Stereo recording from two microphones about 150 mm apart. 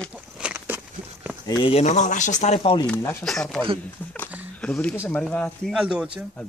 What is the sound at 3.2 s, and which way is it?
Speech, 5° left (ahead or behind).